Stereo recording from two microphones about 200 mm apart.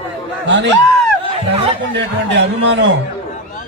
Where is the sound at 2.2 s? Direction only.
60° right (ahead or behind).